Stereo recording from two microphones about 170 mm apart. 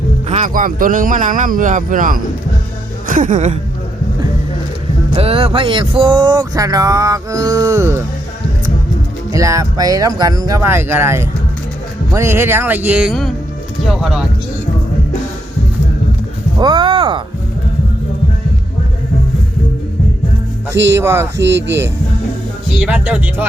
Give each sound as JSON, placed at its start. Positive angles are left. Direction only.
{"t": 0.3, "sound": "speech", "side_deg": -45}
{"t": 5.1, "sound": "speech", "side_deg": -35}
{"t": 9.3, "sound": "speech", "side_deg": -20}
{"t": 16.6, "sound": "speech", "side_deg": -25}
{"t": 20.8, "sound": "speech", "side_deg": -15}
{"t": 21.3, "sound": "speech", "side_deg": -90}
{"t": 22.8, "sound": "speech", "side_deg": -5}